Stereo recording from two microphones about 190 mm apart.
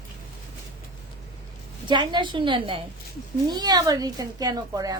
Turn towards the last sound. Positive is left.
turn(degrees=-20)  # may be behind; listen again after turning